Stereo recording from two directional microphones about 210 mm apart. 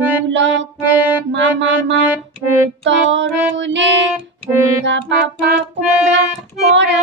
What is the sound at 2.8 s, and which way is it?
Music, 60° right (ahead or behind).